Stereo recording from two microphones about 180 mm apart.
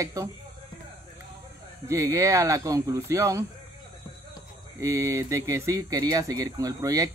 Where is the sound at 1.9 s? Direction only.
15° right (ahead or behind).